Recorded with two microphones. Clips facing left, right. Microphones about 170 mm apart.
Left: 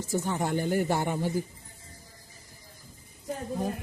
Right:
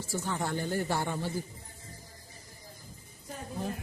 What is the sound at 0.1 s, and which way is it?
Speech, 20° left (ahead or behind).